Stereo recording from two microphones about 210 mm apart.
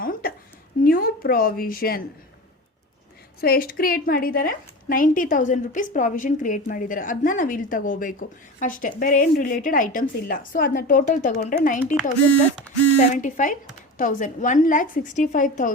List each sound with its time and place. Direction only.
0.0 s a sound: 45° left (ahead or behind)
3.4 s a woman's voice: 45° left (ahead or behind)
13.0 s a woman's voice: 35° left (ahead or behind)